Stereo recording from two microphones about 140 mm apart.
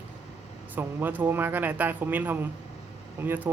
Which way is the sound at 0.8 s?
15° right (ahead or behind).